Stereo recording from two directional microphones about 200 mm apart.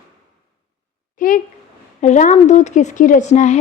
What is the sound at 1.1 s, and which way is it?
Speech, 40° left (ahead or behind).